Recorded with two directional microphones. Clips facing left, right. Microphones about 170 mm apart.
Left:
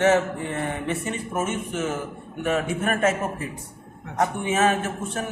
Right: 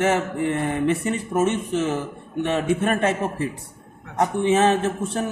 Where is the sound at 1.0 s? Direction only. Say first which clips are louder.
Right 6 dB; 35° right (ahead or behind).